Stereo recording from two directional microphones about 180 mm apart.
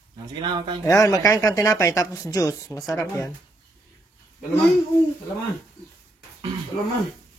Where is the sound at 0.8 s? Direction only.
15° left (ahead or behind).